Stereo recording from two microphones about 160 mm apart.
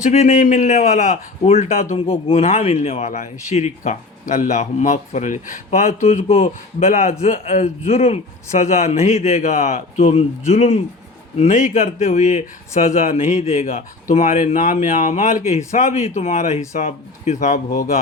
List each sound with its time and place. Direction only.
0.0 s a man's voice: 50° left (ahead or behind)